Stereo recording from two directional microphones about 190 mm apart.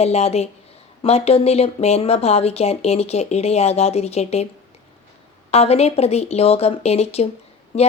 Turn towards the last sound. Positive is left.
turn(degrees=30)  # may be behind; listen again after turning